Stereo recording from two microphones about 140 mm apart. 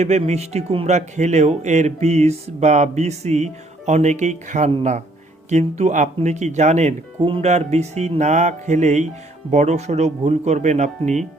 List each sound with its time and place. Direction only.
0.0 s speech: 55° right (ahead or behind)
7.2 s speech: 40° right (ahead or behind)
7.5 s speech: 50° right (ahead or behind)